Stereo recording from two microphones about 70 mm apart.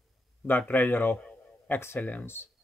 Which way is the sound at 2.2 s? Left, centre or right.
Left.